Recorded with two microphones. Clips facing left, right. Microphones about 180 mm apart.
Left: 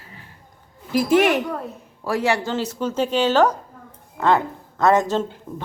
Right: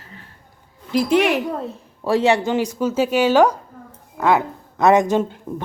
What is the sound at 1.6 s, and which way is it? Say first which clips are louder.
A woman's voice: right 4 dB; 25° right (ahead or behind).